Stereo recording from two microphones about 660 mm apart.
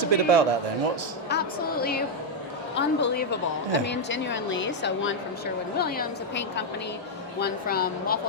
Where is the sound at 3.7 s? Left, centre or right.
Centre.